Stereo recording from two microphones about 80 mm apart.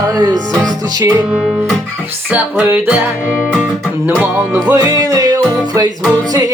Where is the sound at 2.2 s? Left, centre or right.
Right.